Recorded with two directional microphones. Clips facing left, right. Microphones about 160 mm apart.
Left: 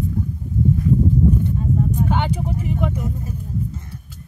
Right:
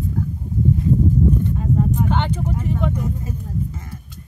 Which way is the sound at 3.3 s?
90° right.